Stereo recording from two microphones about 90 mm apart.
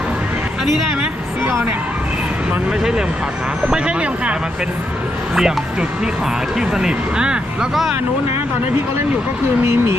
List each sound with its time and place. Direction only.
3.7 s speech: 10° right (ahead or behind)
6.6 s speech: 10° right (ahead or behind)
9.6 s speech: 30° right (ahead or behind)